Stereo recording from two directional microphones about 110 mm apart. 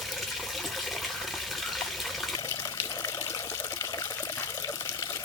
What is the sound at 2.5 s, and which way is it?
Water, 30° left (ahead or behind).